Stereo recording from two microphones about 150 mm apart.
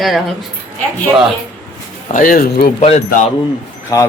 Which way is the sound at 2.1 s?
70° left (ahead or behind).